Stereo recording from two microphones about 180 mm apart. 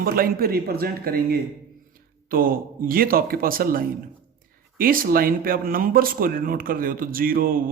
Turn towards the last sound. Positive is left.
turn(degrees=-55)  # may be behind; listen again after turning